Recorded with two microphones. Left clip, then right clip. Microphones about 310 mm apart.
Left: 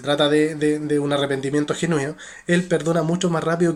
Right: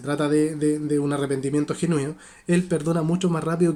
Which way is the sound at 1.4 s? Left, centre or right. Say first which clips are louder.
Left 3 dB; centre.